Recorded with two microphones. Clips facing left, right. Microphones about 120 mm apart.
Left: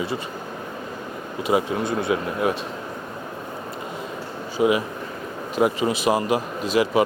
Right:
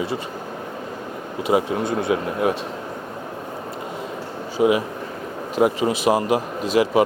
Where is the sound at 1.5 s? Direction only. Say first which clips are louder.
Right 2 dB; 50° right (ahead or behind).